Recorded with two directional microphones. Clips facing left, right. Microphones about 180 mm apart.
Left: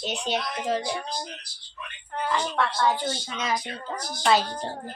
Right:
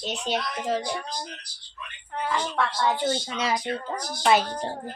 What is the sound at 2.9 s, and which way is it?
Speech, 30° right (ahead or behind).